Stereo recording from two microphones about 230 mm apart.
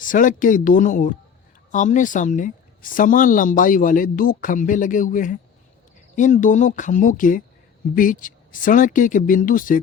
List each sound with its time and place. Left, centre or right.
0.0 s speech: left